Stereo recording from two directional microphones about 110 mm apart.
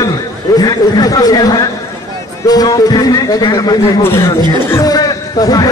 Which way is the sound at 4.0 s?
25° left (ahead or behind).